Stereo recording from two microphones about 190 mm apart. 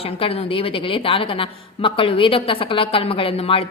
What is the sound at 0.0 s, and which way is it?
A woman's voice, 30° left (ahead or behind).